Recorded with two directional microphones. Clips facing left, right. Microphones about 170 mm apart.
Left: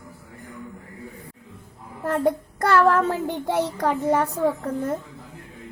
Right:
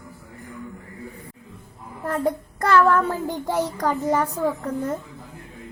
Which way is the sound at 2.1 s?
65° left (ahead or behind).